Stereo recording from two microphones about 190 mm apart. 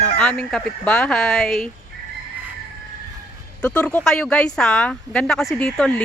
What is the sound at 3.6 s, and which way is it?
Speech, 5° left (ahead or behind).